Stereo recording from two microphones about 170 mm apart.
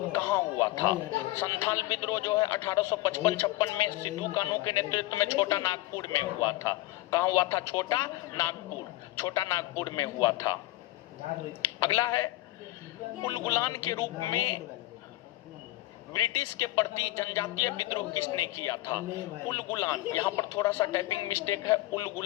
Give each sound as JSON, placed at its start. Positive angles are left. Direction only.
{"t": 0.1, "sound": "a sound", "side_deg": 15}
{"t": 1.4, "sound": "a man's voice", "side_deg": 15}
{"t": 11.8, "sound": "a man's voice", "side_deg": 20}
{"t": 16.1, "sound": "a man's voice", "side_deg": 20}